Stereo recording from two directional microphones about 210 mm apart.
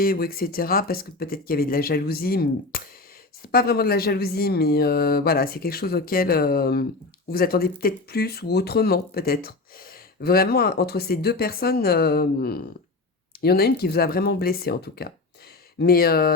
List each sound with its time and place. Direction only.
0.0 s speech: 45° left (ahead or behind)